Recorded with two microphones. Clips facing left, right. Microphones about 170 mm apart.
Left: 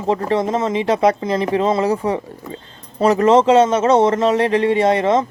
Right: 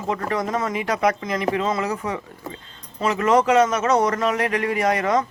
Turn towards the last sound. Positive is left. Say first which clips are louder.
# left 5 dB
turn(degrees=25)  # may be behind; listen again after turning